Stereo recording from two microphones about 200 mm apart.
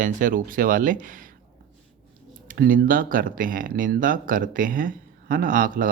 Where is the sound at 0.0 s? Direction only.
40° right (ahead or behind).